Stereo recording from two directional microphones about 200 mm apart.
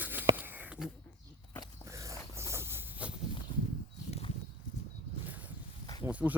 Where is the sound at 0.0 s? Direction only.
10° right (ahead or behind).